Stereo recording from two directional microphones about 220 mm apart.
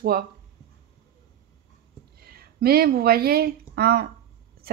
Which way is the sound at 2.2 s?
45° right (ahead or behind).